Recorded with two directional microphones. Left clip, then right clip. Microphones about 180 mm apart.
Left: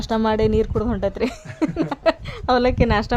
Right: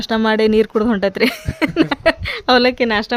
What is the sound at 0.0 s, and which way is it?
A woman's voice, 10° right (ahead or behind).